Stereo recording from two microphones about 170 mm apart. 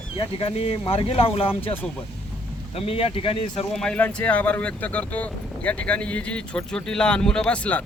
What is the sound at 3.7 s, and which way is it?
Speech, 5° left (ahead or behind).